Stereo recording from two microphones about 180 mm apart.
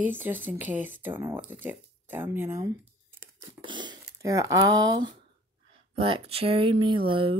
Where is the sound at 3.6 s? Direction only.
25° right (ahead or behind).